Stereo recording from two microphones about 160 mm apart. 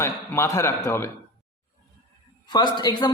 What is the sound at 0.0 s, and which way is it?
A man's voice, 15° left (ahead or behind).